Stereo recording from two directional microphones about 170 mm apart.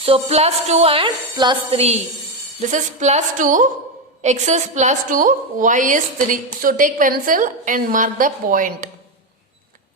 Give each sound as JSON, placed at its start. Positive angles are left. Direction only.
{"t": 0.0, "sound": "a woman's voice", "side_deg": -35}